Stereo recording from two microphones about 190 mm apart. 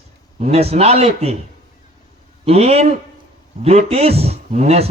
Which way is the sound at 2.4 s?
35° right (ahead or behind).